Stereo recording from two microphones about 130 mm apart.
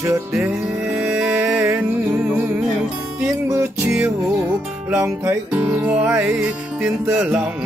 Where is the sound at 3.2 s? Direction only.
20° right (ahead or behind).